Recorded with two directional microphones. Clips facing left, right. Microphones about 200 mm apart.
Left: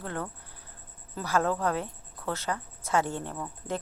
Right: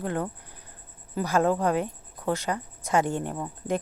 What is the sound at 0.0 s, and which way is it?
A woman's voice, 15° right (ahead or behind).